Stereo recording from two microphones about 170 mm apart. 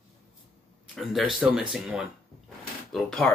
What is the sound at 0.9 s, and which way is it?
A man's voice, centre (ahead or behind).